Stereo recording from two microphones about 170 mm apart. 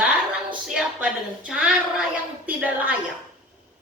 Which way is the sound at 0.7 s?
10° right (ahead or behind).